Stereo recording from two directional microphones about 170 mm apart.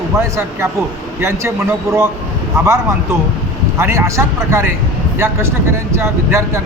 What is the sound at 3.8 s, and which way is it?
A man's voice, 15° right (ahead or behind).